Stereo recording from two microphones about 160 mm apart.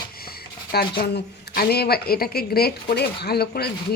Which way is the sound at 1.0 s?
75° left (ahead or behind).